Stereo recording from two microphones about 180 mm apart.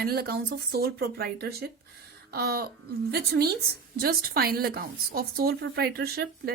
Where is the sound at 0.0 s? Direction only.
60° right (ahead or behind).